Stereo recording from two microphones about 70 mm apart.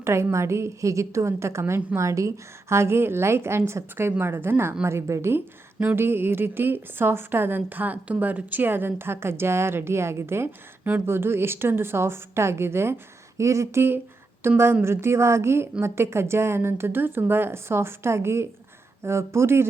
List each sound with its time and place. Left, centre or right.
0.0 s a woman's voice: right
4.9 s a woman's voice: right
5.8 s a woman's voice: right